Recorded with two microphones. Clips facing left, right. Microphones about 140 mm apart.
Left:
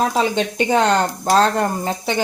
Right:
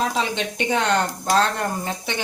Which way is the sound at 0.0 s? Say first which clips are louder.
Left 5 dB; 40° left (ahead or behind).